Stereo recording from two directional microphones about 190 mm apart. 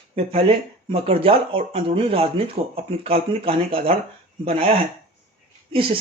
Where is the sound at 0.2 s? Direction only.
30° right (ahead or behind).